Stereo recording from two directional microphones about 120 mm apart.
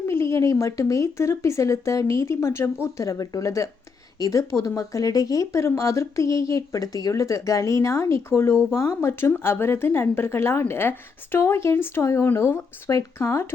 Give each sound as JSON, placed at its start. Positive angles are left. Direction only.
{"t": 0.1, "sound": "speech", "side_deg": 20}